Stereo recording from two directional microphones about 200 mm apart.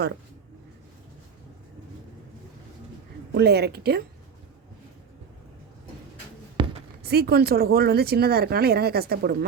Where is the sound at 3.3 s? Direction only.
55° right (ahead or behind).